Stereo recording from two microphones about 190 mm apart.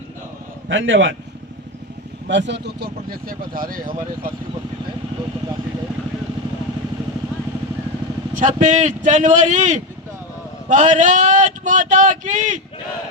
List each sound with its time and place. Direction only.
0.7 s a man's voice: 85° right
2.2 s speech: 65° right (ahead or behind); by 4.3 s 50° right (ahead or behind)
8.4 s a man's voice: 40° right (ahead or behind)